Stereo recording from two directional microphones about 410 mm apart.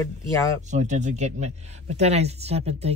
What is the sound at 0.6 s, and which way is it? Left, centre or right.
Speech, centre.